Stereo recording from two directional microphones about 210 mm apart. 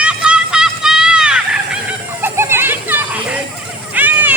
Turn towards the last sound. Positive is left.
turn(degrees=-10)  # may be behind; listen again after turning